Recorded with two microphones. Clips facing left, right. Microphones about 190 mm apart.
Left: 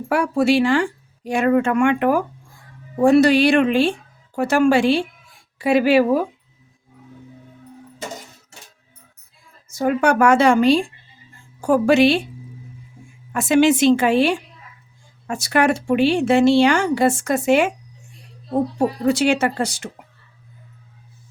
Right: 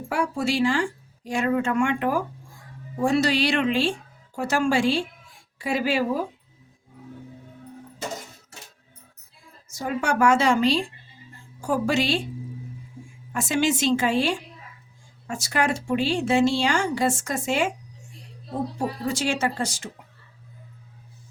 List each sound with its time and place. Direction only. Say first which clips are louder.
0.1 s a woman's voice: left 8 dB; 65° left (ahead or behind)
9.7 s a woman's voice: left 8 dB; 60° left (ahead or behind)
13.3 s a woman's voice: left 8 dB; 60° left (ahead or behind)
19.0 s a woman's voice: left 8 dB; 65° left (ahead or behind)